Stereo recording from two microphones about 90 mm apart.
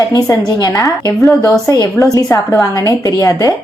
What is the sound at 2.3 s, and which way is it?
A woman's voice, 40° left (ahead or behind).